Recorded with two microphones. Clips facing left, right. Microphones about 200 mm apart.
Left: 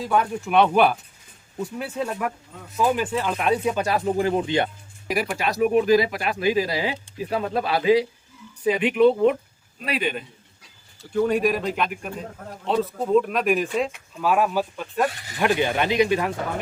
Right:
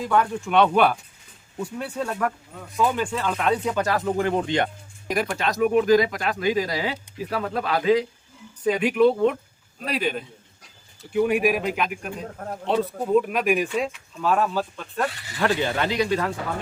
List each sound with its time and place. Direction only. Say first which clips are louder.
0.1 s speech: even; 10° left (ahead or behind)
3.1 s speech: left 1 dB; 15° left (ahead or behind)
4.0 s speech: left 1 dB; 30° left (ahead or behind)
5.0 s speech: even; 5° left (ahead or behind)
11.1 s speech: even; 10° right (ahead or behind); by 16.3 s 15° left (ahead or behind)